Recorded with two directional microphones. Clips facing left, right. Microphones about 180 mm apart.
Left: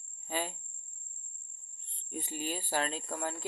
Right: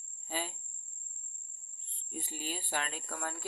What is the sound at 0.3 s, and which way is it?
Cricket, 60° left (ahead or behind).